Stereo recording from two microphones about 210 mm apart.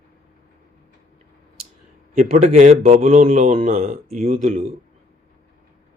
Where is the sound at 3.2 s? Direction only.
40° right (ahead or behind).